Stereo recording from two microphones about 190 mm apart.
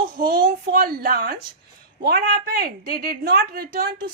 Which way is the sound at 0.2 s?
50° right (ahead or behind).